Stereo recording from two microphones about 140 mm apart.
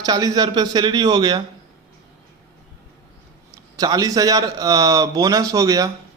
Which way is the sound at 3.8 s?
25° right (ahead or behind).